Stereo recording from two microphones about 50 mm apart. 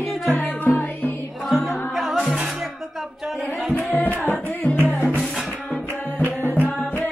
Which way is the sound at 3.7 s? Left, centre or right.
Left.